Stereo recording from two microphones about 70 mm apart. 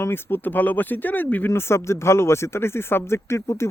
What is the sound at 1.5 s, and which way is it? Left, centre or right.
Speech, left.